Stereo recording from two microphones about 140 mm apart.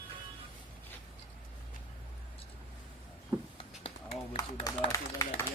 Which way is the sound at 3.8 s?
45° left (ahead or behind).